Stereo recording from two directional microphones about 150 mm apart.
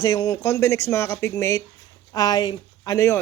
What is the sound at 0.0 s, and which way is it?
Speech, 25° left (ahead or behind).